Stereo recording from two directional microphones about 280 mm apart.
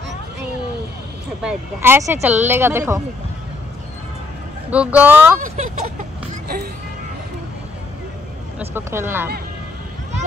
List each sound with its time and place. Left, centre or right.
1.4 s speech: centre
4.6 s speech: centre
5.4 s speech: right
6.4 s a sound: right
8.5 s speech: centre